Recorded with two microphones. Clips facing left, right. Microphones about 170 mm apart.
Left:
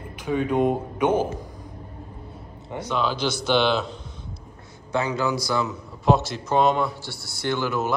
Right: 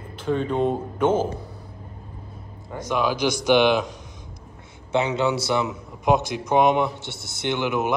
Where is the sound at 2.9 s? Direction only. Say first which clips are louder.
Right 3 dB; 10° right (ahead or behind).